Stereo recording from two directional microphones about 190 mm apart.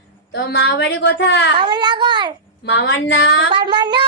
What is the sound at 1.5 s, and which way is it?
Child singing, 25° right (ahead or behind).